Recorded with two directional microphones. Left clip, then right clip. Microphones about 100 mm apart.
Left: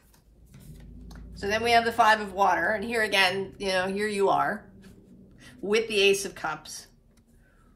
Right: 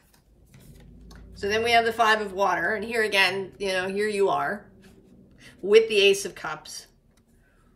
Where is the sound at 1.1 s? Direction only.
45° left (ahead or behind).